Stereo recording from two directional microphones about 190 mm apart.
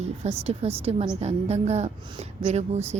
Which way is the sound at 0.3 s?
30° right (ahead or behind).